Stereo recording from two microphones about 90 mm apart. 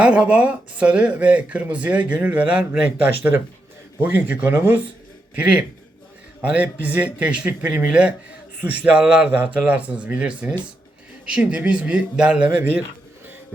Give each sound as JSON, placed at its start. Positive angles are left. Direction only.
{"t": 0.0, "sound": "speech", "side_deg": -10}